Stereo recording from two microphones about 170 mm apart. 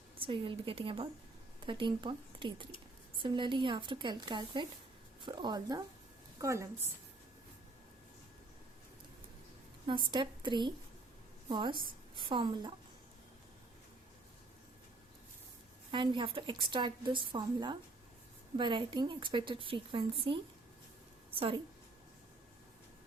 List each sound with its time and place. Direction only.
0.2 s a woman's voice: 30° right (ahead or behind)
9.8 s a woman's voice: 25° right (ahead or behind)
15.9 s a woman's voice: 30° right (ahead or behind)